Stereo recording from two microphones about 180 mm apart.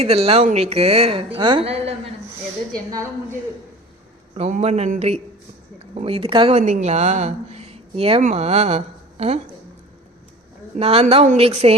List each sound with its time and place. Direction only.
0.0 s speech: 35° right (ahead or behind)
4.4 s a woman's voice: 40° right (ahead or behind)
10.8 s speech: 35° right (ahead or behind)